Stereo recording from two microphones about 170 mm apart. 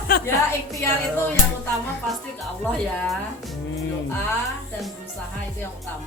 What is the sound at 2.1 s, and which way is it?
Music, centre (ahead or behind).